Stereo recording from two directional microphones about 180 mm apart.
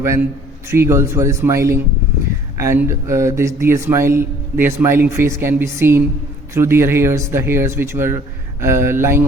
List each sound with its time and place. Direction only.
0.0 s a man's voice: 15° right (ahead or behind)